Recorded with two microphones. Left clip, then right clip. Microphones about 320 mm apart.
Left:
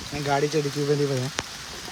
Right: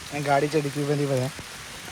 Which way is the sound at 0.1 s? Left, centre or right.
Centre.